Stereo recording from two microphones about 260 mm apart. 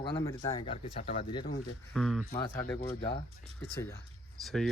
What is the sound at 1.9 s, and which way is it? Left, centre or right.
Speech, centre.